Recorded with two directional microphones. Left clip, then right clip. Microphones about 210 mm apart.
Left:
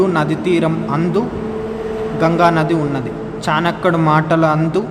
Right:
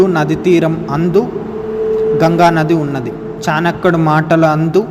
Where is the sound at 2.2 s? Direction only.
15° right (ahead or behind).